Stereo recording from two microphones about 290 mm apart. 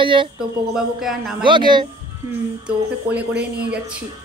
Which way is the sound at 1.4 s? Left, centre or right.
Centre.